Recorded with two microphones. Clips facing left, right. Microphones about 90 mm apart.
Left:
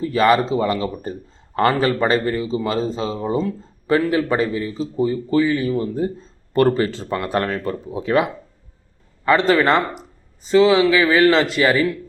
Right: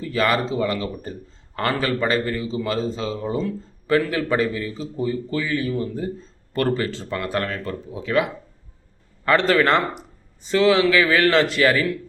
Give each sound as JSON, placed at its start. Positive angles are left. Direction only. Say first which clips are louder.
{"t": 0.0, "sound": "speech", "louder": "left 5 dB", "side_deg": 25}
{"t": 9.2, "sound": "speech", "louder": "left 2 dB", "side_deg": 10}